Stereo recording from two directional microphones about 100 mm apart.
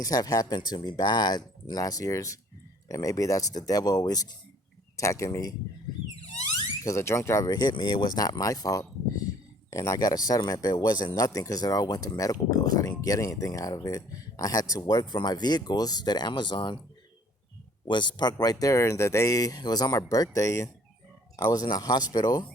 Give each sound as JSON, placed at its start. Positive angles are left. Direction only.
{"t": 0.0, "sound": "speech", "side_deg": 40}
{"t": 4.9, "sound": "speech", "side_deg": 30}
{"t": 6.8, "sound": "speech", "side_deg": 30}
{"t": 7.4, "sound": "speech", "side_deg": 45}
{"t": 17.8, "sound": "speech", "side_deg": 50}